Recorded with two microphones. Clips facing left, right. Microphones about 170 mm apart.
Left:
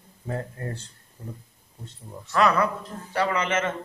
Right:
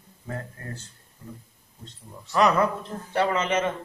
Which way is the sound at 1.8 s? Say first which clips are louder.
Left 3 dB; 20° right (ahead or behind).